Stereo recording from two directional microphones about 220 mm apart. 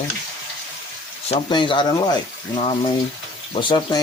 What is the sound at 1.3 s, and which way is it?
Speech, 20° left (ahead or behind).